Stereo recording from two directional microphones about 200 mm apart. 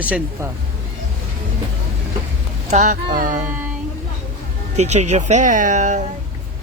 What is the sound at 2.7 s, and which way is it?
Speech, 40° right (ahead or behind).